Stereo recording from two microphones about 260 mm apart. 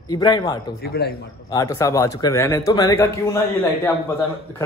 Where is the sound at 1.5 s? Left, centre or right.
Centre.